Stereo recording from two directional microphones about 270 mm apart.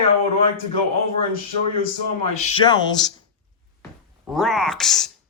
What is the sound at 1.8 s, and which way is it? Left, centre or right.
A man's voice, left.